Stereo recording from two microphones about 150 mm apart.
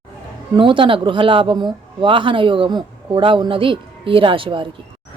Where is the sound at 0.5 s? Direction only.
35° right (ahead or behind).